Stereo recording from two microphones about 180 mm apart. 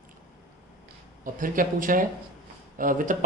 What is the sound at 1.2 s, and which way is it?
Speech, 50° right (ahead or behind).